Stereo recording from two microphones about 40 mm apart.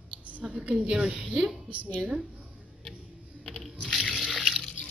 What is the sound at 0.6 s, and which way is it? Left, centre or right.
Speech, right.